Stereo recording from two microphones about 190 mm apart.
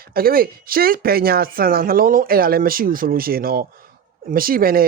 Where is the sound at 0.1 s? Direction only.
50° right (ahead or behind).